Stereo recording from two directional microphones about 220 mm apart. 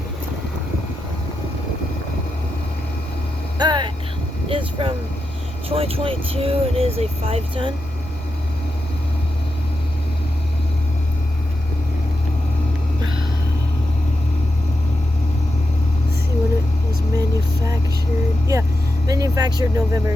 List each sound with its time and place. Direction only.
3.6 s vehicle: 20° right (ahead or behind)
5.6 s speech: 25° right (ahead or behind)
17.2 s music: 15° right (ahead or behind)
19.0 s vehicle: 15° right (ahead or behind)